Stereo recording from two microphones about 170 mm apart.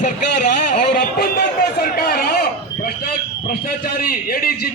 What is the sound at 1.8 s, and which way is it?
Chatter, 65° left (ahead or behind).